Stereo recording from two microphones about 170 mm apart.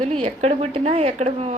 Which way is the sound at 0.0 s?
35° right (ahead or behind).